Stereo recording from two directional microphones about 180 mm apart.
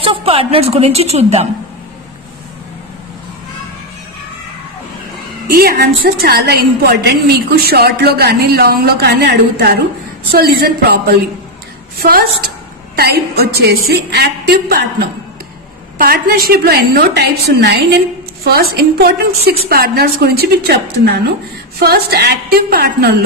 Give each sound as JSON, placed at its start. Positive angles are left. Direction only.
{"t": 0.0, "sound": "a woman's voice", "side_deg": -30}
{"t": 5.5, "sound": "a woman's voice", "side_deg": -60}